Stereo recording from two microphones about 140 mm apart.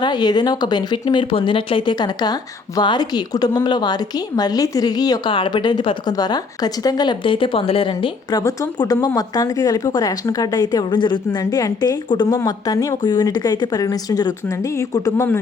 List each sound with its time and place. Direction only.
0.0 s a woman's voice: 30° left (ahead or behind)